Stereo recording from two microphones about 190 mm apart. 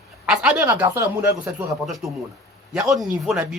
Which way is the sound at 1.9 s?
Centre (ahead or behind).